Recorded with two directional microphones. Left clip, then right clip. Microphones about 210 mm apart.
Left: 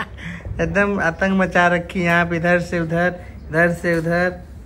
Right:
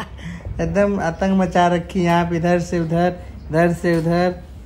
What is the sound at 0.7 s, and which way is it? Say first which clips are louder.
A woman's voice: even; 15° right (ahead or behind).